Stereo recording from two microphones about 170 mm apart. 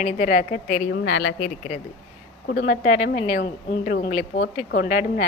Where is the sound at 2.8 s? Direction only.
45° left (ahead or behind).